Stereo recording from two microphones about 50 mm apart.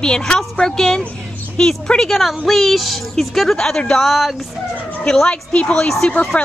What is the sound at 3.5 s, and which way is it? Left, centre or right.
A woman's voice, centre.